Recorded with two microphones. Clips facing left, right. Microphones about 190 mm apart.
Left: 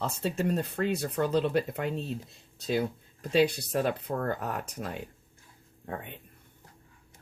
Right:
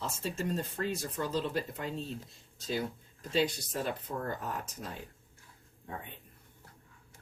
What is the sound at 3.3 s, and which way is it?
Speech, 65° left (ahead or behind).